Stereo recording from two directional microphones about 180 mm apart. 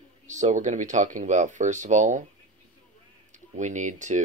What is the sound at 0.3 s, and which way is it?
Speech, 40° right (ahead or behind).